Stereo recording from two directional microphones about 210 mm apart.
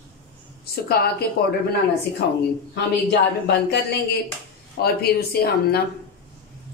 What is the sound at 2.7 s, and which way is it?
A woman's voice, 55° left (ahead or behind).